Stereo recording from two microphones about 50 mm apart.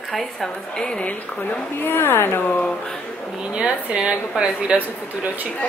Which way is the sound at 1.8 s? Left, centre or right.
Left.